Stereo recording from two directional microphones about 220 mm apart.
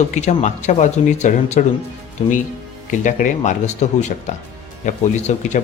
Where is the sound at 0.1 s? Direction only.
30° left (ahead or behind).